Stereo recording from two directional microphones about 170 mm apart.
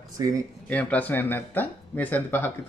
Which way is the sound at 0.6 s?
10° left (ahead or behind).